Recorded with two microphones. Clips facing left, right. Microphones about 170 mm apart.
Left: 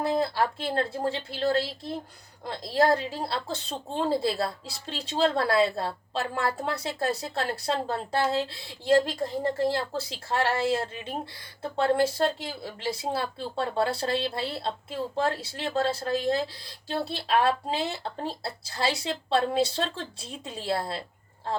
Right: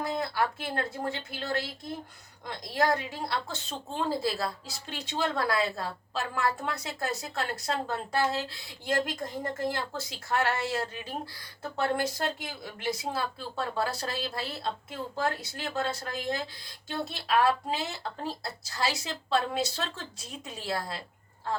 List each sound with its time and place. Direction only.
0.0 s speech: 30° left (ahead or behind)